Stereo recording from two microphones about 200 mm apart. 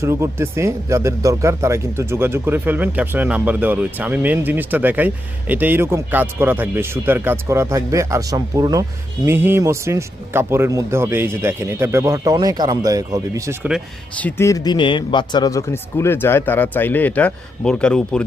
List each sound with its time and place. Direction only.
0.0 s speech: 15° right (ahead or behind)
14.2 s speech: 10° left (ahead or behind)